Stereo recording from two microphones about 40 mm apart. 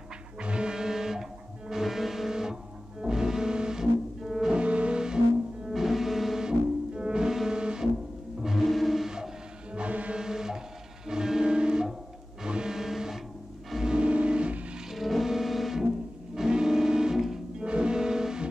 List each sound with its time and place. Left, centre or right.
0.4 s music: right
4.6 s music: right
5.7 s music: centre
7.0 s music: right
8.6 s a sound: centre
9.1 s music: centre
9.8 s music: right
10.1 s music: centre
13.8 s vehicle: right
14.9 s music: centre
16.3 s music: centre